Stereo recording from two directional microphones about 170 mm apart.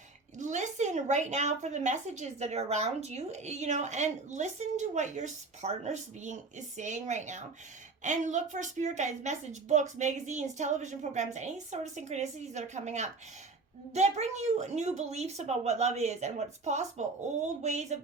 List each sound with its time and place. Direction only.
0.3 s a woman's voice: 45° right (ahead or behind)